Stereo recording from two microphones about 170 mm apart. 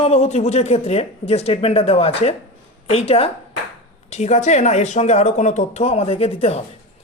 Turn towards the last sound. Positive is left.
turn(degrees=35)  # may be behind; listen again after turning